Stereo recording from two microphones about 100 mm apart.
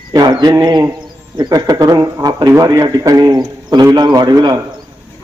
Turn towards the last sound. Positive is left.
turn(degrees=-45)  # may be behind; listen again after turning